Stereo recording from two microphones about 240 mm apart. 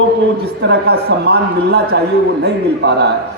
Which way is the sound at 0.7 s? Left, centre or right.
Right.